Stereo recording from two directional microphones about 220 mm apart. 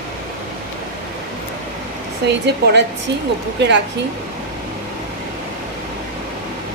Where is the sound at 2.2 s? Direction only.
50° right (ahead or behind).